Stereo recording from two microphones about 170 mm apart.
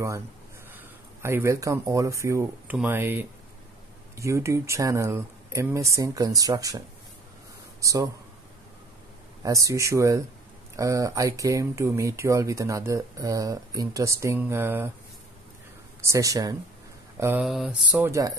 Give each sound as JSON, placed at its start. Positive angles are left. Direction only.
{"t": 0.7, "sound": "speech", "side_deg": -15}
{"t": 7.8, "sound": "speech", "side_deg": -20}
{"t": 9.4, "sound": "speech", "side_deg": -20}
{"t": 16.0, "sound": "speech", "side_deg": -20}
{"t": 17.5, "sound": "mantra", "side_deg": 0}
{"t": 17.9, "sound": "speech", "side_deg": -15}